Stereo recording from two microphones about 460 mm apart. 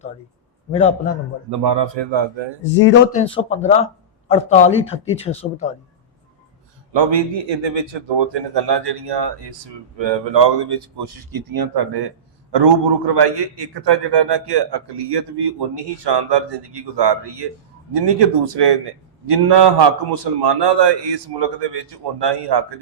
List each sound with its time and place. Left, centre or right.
0.7 s speech: centre
1.5 s speech: right
2.8 s speech: left
6.9 s speech: right